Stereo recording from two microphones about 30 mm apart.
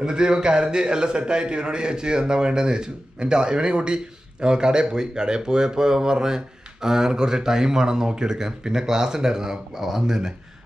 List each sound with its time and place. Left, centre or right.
0.0 s a man's voice: right